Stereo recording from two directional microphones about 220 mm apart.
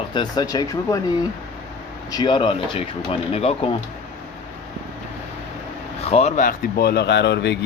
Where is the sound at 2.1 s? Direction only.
20° left (ahead or behind).